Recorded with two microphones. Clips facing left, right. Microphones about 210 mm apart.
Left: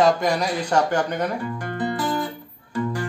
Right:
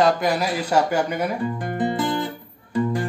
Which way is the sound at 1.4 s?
20° right (ahead or behind).